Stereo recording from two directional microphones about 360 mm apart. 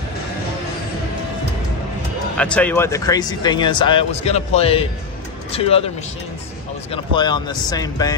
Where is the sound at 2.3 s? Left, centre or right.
Centre.